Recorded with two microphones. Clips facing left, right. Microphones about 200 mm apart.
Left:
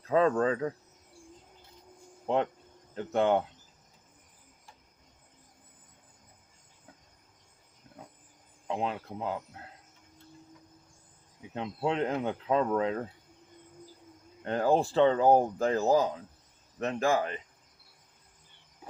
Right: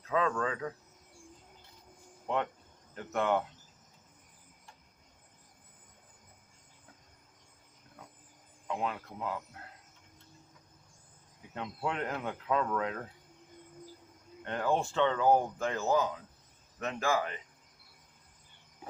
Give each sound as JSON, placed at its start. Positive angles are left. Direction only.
{"t": 0.0, "sound": "speech", "side_deg": 35}
{"t": 2.2, "sound": "speech", "side_deg": 30}
{"t": 7.9, "sound": "cricket", "side_deg": 20}
{"t": 8.6, "sound": "speech", "side_deg": 30}
{"t": 11.5, "sound": "speech", "side_deg": 30}
{"t": 14.4, "sound": "speech", "side_deg": 35}